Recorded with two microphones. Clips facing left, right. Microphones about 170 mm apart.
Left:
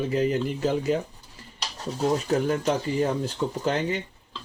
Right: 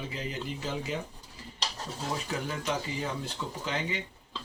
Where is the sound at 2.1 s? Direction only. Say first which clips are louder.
Left 9 dB; 45° left (ahead or behind).